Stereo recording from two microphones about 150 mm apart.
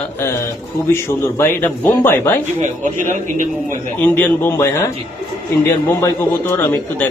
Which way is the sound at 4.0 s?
15° left (ahead or behind).